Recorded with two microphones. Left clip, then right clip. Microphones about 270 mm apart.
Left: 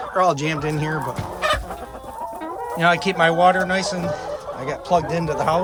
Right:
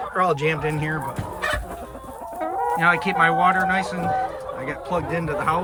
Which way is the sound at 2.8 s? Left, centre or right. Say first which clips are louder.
Left 2 dB; centre.